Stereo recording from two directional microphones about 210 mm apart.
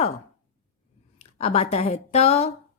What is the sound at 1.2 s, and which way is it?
Speech, 30° left (ahead or behind).